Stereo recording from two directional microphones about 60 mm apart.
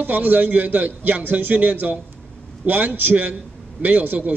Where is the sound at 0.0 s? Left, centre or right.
Right.